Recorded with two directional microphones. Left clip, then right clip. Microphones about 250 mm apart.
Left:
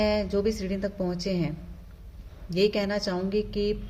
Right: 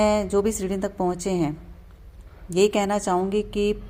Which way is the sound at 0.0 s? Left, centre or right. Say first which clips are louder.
Right 5 dB; right.